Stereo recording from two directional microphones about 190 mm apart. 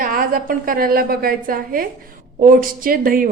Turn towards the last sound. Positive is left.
turn(degrees=-50)  # may be behind; listen again after turning